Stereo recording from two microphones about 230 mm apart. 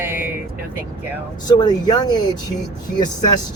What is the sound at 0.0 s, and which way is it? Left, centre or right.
Vehicle, centre.